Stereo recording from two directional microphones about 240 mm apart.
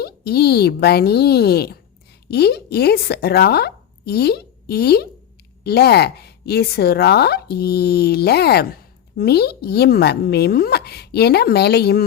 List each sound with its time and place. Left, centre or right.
0.0 s a woman's voice: left